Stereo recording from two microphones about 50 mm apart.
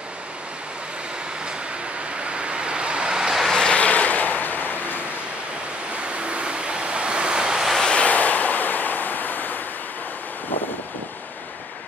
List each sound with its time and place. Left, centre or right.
2.2 s vehicle: right
3.5 s vehicle: centre
3.8 s a sound: left
6.0 s vehicle: right
7.8 s waves: left